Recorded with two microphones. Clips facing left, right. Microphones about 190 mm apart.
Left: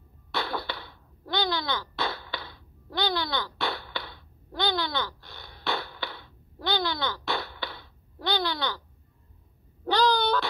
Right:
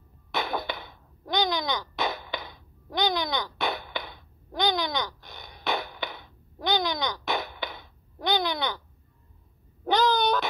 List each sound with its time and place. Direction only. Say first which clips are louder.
0.3 s burping: right 2 dB; 15° right (ahead or behind)
9.8 s meow: right 1 dB; 20° right (ahead or behind)